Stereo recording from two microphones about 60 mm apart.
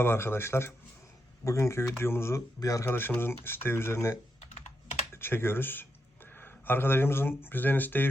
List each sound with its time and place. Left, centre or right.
0.0 s speech: left
2.6 s speech: left
2.8 s speech: left
5.1 s speech: left